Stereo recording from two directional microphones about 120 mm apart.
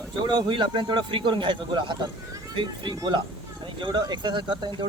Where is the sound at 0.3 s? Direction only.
40° right (ahead or behind).